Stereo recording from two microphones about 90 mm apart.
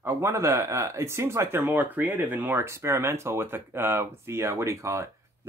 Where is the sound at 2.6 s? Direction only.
30° right (ahead or behind).